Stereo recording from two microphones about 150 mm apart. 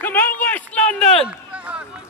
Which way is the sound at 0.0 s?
15° left (ahead or behind).